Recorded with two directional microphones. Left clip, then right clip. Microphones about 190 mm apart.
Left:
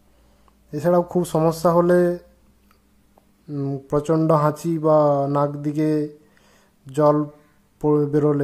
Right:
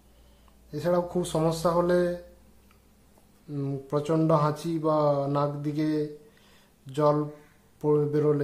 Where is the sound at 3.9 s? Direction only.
30° left (ahead or behind).